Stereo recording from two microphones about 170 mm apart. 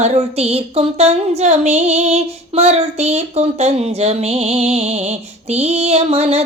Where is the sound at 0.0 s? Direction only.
40° right (ahead or behind).